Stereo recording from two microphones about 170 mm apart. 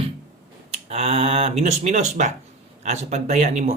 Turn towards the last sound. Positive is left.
turn(degrees=-40)  # may be behind; listen again after turning